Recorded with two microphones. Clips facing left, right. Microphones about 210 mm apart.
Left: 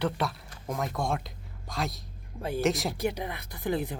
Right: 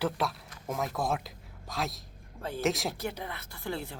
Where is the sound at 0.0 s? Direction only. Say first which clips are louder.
Left 1 dB; centre (ahead or behind).